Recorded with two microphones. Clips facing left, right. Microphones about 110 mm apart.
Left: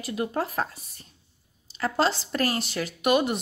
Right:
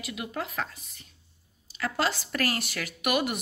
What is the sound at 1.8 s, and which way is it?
A woman's voice, 30° left (ahead or behind).